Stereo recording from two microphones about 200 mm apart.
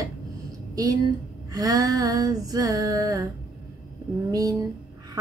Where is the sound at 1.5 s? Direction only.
15° right (ahead or behind).